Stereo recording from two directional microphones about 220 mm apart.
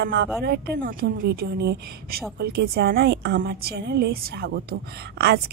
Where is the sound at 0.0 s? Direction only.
50° right (ahead or behind).